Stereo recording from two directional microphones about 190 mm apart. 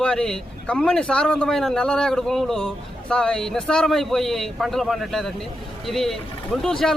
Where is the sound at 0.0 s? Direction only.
5° left (ahead or behind).